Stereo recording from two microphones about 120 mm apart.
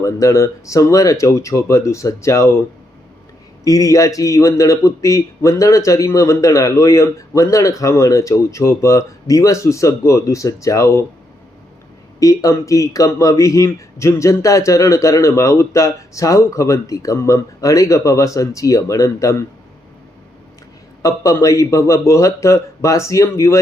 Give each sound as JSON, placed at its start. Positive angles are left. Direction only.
{"t": 0.0, "sound": "speech", "side_deg": 25}
{"t": 3.6, "sound": "speech", "side_deg": 30}
{"t": 12.2, "sound": "speech", "side_deg": 30}
{"t": 21.0, "sound": "speech", "side_deg": 30}